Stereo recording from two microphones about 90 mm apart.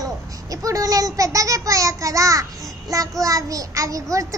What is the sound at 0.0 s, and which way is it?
A child's voice, 40° right (ahead or behind).